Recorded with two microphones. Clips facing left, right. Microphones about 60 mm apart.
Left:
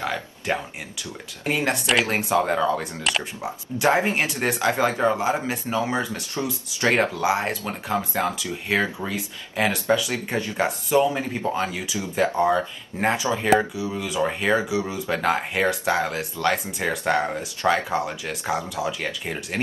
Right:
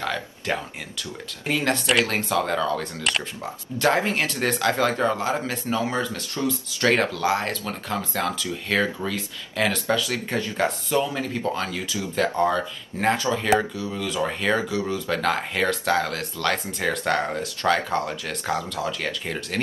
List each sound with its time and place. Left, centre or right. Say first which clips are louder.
0.0 s a sound: even; centre
1.5 s speech: even; centre
3.0 s speech: left 1 dB; centre
3.7 s speech: left 1 dB; centre